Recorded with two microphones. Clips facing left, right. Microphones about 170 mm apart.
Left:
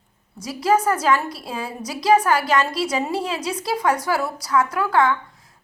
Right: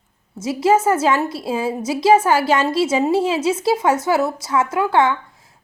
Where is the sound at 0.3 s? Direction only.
25° right (ahead or behind).